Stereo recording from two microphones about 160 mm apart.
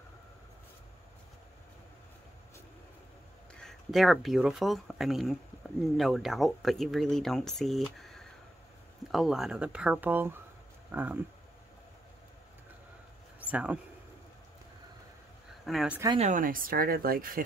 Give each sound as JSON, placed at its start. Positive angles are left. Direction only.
{"t": 3.6, "sound": "speech", "side_deg": 0}
{"t": 13.4, "sound": "speech", "side_deg": -10}
{"t": 15.6, "sound": "speech", "side_deg": 0}
{"t": 16.2, "sound": "speech", "side_deg": -55}